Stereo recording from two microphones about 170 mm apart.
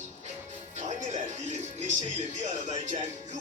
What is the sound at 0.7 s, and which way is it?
Music, 45° right (ahead or behind).